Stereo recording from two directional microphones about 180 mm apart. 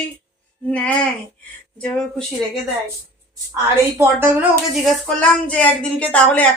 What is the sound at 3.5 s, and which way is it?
Speech, 15° right (ahead or behind).